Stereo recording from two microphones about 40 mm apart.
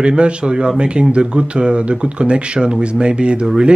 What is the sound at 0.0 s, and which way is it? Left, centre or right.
A man's voice, right.